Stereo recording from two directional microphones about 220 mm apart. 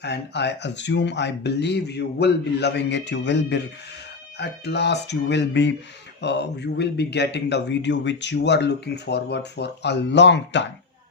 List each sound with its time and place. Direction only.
0.0 s speech: 50° left (ahead or behind)